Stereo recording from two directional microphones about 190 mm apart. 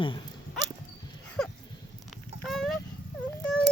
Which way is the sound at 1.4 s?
5° left (ahead or behind).